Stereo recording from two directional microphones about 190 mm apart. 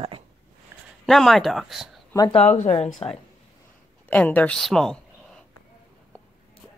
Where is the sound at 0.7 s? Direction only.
15° right (ahead or behind).